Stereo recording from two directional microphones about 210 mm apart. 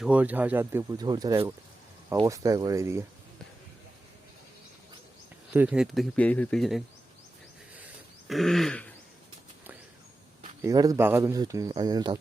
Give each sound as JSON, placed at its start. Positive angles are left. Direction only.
{"t": 0.0, "sound": "speech", "side_deg": -5}
{"t": 5.5, "sound": "speech", "side_deg": -5}
{"t": 8.3, "sound": "speech", "side_deg": 0}
{"t": 10.6, "sound": "speech", "side_deg": -15}